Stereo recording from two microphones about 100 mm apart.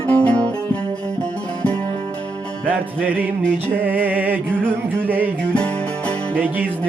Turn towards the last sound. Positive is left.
turn(degrees=-15)  # may be behind; listen again after turning